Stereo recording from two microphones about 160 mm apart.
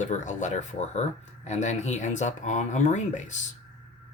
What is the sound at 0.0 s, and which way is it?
Speech, 50° left (ahead or behind).